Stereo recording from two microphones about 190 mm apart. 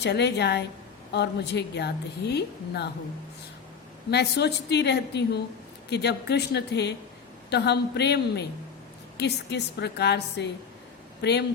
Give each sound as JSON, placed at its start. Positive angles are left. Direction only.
{"t": 0.0, "sound": "a woman's voice", "side_deg": 60}
{"t": 4.1, "sound": "a woman's voice", "side_deg": 60}